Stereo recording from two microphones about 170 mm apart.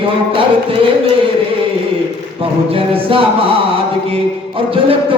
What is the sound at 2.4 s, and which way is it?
Speech, 30° right (ahead or behind).